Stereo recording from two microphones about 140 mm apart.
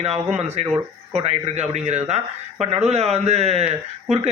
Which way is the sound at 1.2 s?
50° right (ahead or behind).